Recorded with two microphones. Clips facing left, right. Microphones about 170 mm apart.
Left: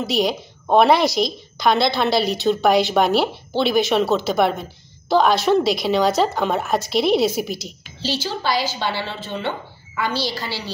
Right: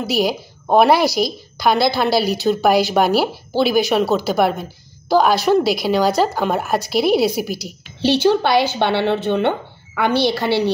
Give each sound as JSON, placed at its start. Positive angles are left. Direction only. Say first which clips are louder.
{"t": 0.0, "sound": "a woman's voice", "louder": "right 2 dB", "side_deg": -5}
{"t": 8.0, "sound": "a woman's voice", "louder": "right 10 dB", "side_deg": -60}